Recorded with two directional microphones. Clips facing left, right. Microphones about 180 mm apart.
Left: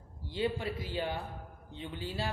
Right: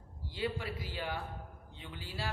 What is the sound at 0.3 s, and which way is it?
A man's voice, 25° left (ahead or behind).